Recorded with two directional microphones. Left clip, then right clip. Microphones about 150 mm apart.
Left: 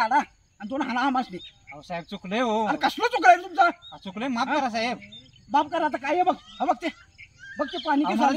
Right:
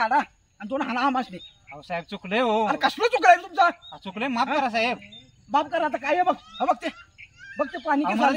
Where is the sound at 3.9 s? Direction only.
5° left (ahead or behind).